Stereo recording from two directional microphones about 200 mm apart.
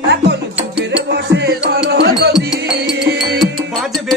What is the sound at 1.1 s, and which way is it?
Music, 55° right (ahead or behind).